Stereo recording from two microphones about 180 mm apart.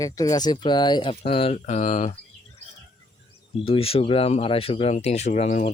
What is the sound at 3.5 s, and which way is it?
Speech, 30° left (ahead or behind).